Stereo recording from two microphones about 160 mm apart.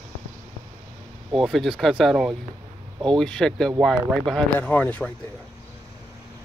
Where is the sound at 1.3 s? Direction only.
Centre (ahead or behind).